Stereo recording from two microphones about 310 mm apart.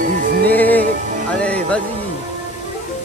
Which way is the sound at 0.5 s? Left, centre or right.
Centre.